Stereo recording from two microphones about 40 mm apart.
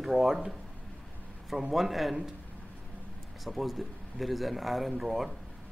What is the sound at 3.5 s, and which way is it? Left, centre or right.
A man's voice, centre.